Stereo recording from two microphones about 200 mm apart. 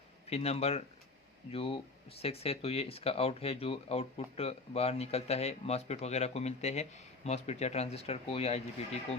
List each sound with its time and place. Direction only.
0.3 s speech: 30° left (ahead or behind)